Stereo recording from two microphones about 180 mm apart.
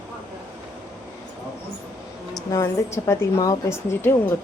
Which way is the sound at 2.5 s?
15° left (ahead or behind).